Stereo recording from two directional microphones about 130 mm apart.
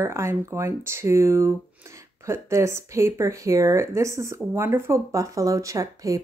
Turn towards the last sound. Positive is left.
turn(degrees=-25)  # may be behind; listen again after turning